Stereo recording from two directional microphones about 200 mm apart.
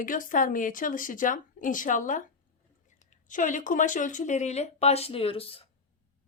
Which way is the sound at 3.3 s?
40° left (ahead or behind).